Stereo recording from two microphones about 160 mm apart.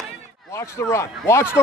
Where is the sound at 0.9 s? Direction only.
15° left (ahead or behind).